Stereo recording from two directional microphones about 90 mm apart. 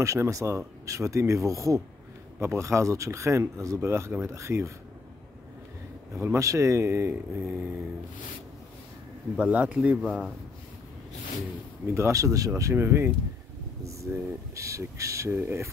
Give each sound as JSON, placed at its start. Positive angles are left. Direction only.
{"t": 0.0, "sound": "speech", "side_deg": -35}
{"t": 6.2, "sound": "speech", "side_deg": -35}
{"t": 9.4, "sound": "speech", "side_deg": -15}
{"t": 11.9, "sound": "speech", "side_deg": -35}